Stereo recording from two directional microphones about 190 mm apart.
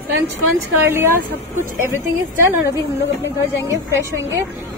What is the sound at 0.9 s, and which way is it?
Speech, 15° right (ahead or behind).